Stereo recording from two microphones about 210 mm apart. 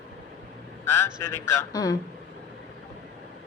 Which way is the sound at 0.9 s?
10° left (ahead or behind).